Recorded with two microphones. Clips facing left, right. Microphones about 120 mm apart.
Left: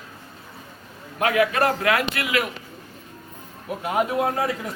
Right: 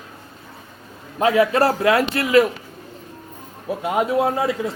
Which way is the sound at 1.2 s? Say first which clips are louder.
Right 4 dB; 30° right (ahead or behind).